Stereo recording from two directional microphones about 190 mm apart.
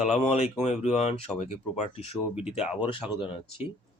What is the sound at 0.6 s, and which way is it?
Speech, 35° left (ahead or behind).